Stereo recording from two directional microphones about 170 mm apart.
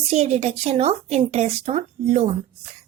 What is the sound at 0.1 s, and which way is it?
A child's voice, 40° right (ahead or behind).